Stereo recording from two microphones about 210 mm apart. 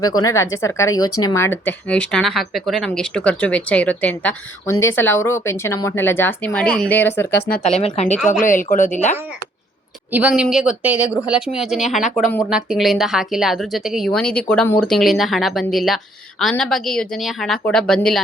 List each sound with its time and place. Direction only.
0.2 s speech: 15° left (ahead or behind)
7.3 s speech: 45° left (ahead or behind)
7.6 s a woman's voice: 30° left (ahead or behind)
10.1 s a woman's voice: 5° right (ahead or behind)